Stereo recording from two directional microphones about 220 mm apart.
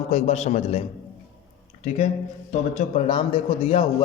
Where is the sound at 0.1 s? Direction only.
30° left (ahead or behind).